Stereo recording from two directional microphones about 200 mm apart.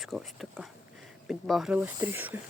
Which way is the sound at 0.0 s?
Centre (ahead or behind).